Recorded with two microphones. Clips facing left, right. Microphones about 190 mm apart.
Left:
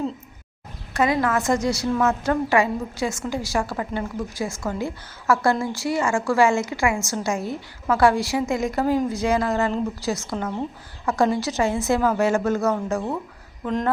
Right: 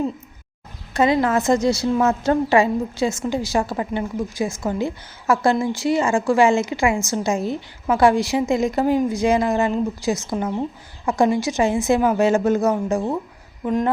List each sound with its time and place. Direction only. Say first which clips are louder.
0.9 s a woman's voice: right 3 dB; 25° right (ahead or behind)